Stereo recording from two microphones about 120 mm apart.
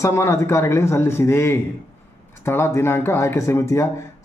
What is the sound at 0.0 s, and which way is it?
Speech, 25° left (ahead or behind).